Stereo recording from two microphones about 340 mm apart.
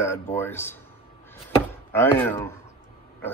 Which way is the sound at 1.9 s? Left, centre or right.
Centre.